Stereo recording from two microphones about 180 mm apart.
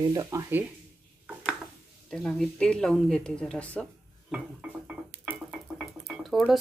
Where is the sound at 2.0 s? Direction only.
5° left (ahead or behind).